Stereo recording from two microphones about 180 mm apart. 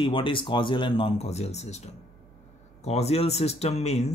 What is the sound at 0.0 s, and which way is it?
Speech, 30° left (ahead or behind).